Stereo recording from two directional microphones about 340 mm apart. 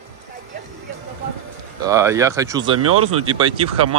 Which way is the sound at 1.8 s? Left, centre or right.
Centre.